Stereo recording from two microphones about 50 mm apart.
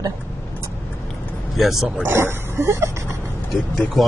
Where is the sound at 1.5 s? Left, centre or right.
Centre.